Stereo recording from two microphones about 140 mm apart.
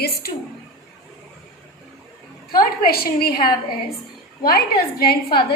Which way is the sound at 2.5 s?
90° left.